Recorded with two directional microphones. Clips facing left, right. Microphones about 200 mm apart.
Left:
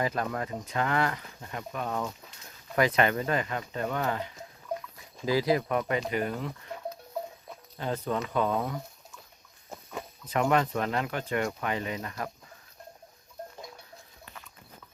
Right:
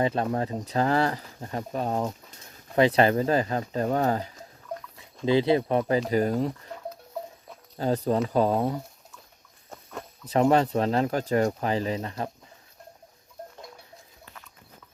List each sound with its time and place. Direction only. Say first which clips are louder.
0.0 s speech: right 5 dB; 30° right (ahead or behind)
5.2 s speech: right 4 dB; 25° right (ahead or behind)
7.8 s speech: right 6 dB; 35° right (ahead or behind)
9.6 s a sound: even; 5° left (ahead or behind)
10.2 s speech: right 5 dB; 30° right (ahead or behind)